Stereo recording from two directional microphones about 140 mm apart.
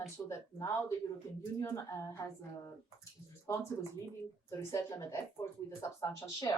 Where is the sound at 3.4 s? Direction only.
20° left (ahead or behind).